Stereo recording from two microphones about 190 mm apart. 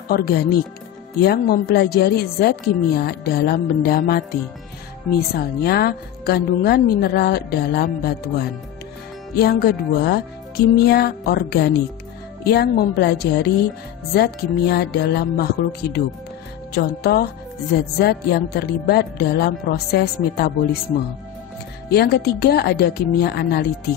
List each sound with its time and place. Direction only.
0.1 s speech: 55° left (ahead or behind)
21.8 s speech: 55° left (ahead or behind)